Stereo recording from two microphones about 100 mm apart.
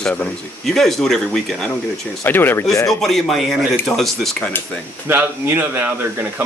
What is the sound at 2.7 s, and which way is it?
Speech, 35° left (ahead or behind).